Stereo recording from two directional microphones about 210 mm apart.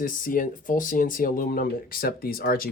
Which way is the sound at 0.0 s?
40° left (ahead or behind).